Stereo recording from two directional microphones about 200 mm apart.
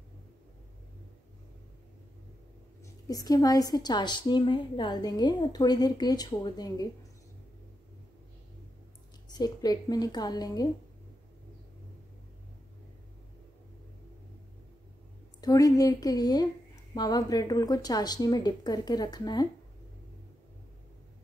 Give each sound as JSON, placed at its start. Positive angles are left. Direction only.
{"t": 3.1, "sound": "a woman's voice", "side_deg": 20}
{"t": 9.3, "sound": "a woman's voice", "side_deg": 20}
{"t": 15.4, "sound": "a woman's voice", "side_deg": 15}